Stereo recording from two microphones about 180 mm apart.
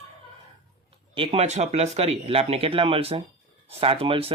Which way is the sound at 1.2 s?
35° right (ahead or behind).